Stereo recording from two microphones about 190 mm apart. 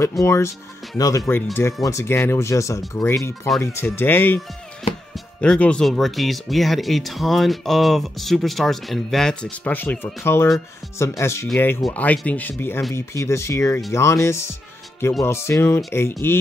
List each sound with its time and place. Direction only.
0.2 s speech: 15° left (ahead or behind)
5.4 s speech: 5° left (ahead or behind)